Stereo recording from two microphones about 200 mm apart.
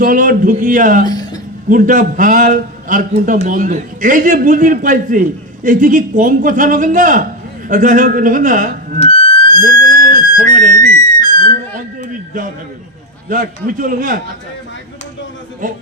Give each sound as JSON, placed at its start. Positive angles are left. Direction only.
{"t": 0.0, "sound": "speech", "side_deg": -45}
{"t": 1.0, "sound": "music", "side_deg": 20}
{"t": 1.7, "sound": "a man's voice", "side_deg": -40}
{"t": 9.0, "sound": "music", "side_deg": -40}
{"t": 13.2, "sound": "a man's voice", "side_deg": -40}